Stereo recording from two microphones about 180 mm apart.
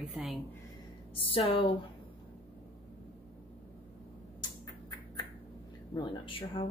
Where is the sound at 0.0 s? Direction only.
Centre (ahead or behind).